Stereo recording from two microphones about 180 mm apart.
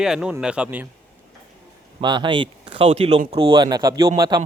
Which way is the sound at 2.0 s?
25° right (ahead or behind).